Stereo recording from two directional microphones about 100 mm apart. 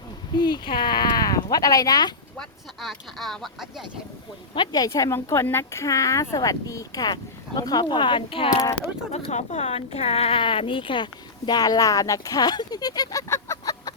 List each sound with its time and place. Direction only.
0.3 s speech: 45° left (ahead or behind)
2.4 s speech: 5° left (ahead or behind)
4.5 s speech: 45° left (ahead or behind)
9.1 s speech: 90° left; by 13.6 s 30° left (ahead or behind)